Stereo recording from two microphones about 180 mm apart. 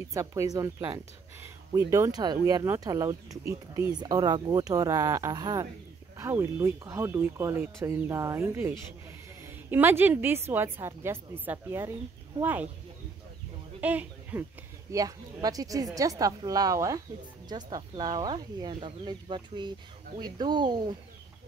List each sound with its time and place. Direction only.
0.1 s speech: 15° right (ahead or behind)
13.7 s a sound: 10° right (ahead or behind)
14.9 s speech: 20° right (ahead or behind)